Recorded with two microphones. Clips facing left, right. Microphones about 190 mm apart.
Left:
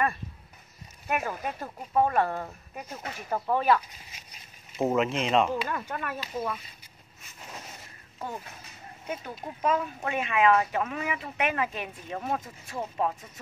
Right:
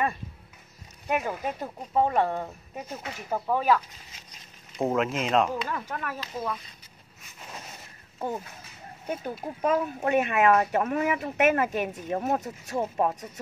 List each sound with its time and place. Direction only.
1.0 s speech: 20° right (ahead or behind)
3.3 s speech: 5° right (ahead or behind)
3.7 s speech: 10° left (ahead or behind)
9.0 s speech: 40° right (ahead or behind)